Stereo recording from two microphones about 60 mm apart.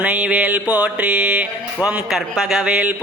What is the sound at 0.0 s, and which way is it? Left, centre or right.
Mantra, centre.